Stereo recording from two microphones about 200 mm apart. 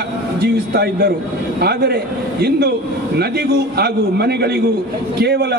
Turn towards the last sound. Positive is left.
turn(degrees=-55)  # may be behind; listen again after turning